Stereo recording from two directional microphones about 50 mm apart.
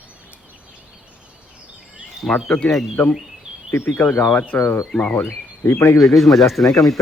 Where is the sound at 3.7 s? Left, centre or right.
Left.